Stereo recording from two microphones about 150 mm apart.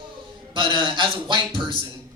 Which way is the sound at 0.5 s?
35° right (ahead or behind).